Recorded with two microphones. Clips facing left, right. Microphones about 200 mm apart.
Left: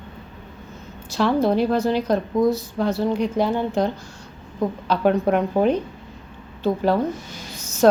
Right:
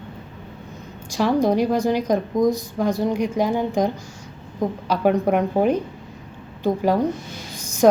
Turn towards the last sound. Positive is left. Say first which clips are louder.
# right 1 dB
turn(degrees=-15)  # may be behind; listen again after turning